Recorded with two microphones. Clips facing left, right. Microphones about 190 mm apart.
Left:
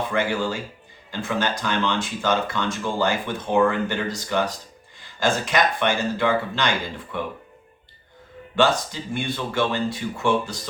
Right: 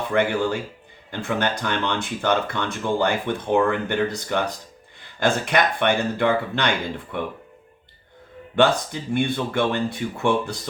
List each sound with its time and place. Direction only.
0.1 s speech: 55° right (ahead or behind)
8.5 s speech: 55° right (ahead or behind)